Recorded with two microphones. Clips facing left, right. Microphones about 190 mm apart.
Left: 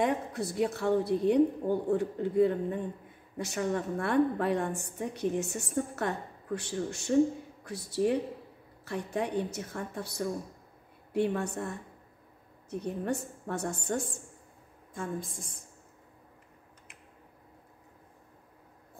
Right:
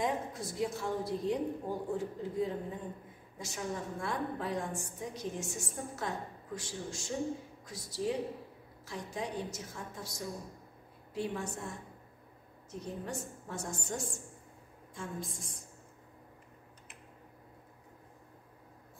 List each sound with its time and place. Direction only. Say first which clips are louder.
0.0 s a woman's voice: left 5 dB; 65° left (ahead or behind)